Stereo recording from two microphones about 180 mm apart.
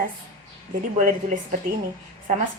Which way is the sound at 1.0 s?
50° right (ahead or behind).